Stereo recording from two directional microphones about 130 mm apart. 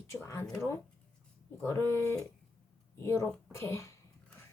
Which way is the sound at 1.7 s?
20° left (ahead or behind).